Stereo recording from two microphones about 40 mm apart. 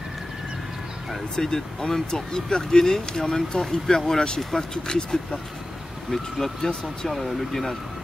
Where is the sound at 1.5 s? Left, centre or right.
Centre.